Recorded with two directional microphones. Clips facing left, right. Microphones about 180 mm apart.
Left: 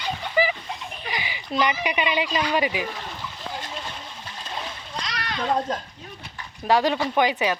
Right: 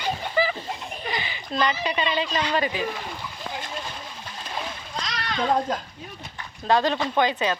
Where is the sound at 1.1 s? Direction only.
15° left (ahead or behind).